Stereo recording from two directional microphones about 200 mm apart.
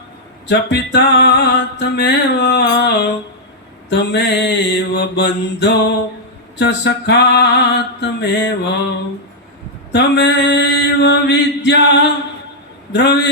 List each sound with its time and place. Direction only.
0.4 s music: 60° left (ahead or behind)
9.9 s music: 60° left (ahead or behind)